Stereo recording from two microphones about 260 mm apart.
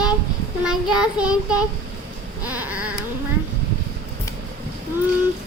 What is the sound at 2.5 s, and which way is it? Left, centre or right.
Baby cry, centre.